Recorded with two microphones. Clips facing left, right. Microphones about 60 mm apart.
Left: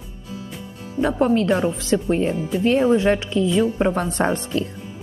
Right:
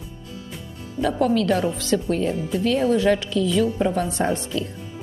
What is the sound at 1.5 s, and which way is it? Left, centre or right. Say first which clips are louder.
Speech: left 2 dB; left.